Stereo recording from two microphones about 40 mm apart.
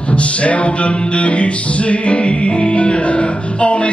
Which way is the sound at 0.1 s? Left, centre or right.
Left.